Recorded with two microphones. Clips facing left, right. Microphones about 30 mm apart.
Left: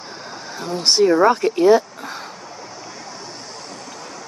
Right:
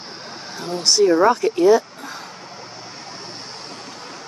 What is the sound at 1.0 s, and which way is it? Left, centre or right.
Speech, centre.